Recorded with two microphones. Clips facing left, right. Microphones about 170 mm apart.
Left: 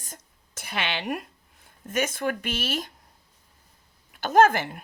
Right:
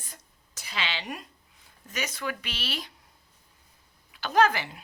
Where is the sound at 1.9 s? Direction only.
50° left (ahead or behind).